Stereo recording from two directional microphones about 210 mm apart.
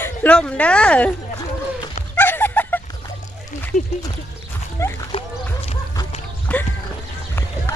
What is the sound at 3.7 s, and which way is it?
Speech, 30° left (ahead or behind).